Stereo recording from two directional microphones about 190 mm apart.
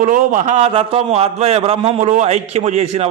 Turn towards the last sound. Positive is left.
turn(degrees=-35)  # may be behind; listen again after turning